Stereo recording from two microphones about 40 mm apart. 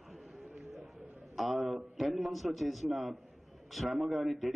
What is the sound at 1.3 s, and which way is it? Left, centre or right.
A man's voice, centre.